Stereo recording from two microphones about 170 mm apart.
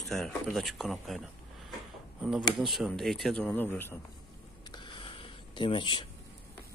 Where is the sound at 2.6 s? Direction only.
Centre (ahead or behind).